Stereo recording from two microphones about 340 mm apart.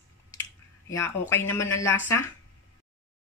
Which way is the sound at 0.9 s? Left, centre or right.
Centre.